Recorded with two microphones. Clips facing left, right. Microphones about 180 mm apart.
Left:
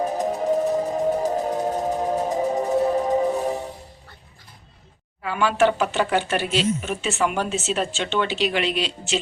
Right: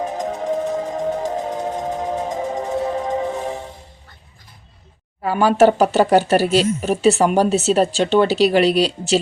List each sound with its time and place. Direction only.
0.0 s music: 5° left (ahead or behind)
5.2 s speech: 40° right (ahead or behind)